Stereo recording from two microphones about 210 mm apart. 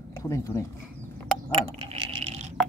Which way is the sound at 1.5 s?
25° right (ahead or behind).